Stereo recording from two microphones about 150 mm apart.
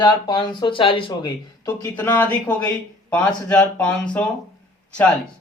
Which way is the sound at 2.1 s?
10° left (ahead or behind).